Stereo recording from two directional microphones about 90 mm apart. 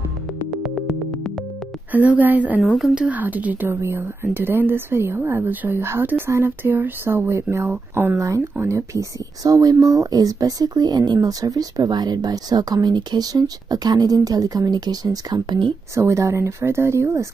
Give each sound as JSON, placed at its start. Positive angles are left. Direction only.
{"t": 1.9, "sound": "a woman's voice", "side_deg": -20}
{"t": 8.2, "sound": "speech", "side_deg": -35}
{"t": 15.9, "sound": "speech", "side_deg": -35}